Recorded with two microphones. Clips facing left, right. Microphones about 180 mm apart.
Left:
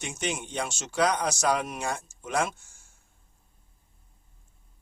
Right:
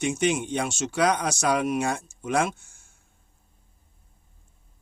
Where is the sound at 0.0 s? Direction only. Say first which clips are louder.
Right 9 dB; 55° right (ahead or behind).